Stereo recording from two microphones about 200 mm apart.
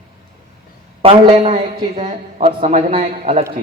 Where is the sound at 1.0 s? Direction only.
30° right (ahead or behind).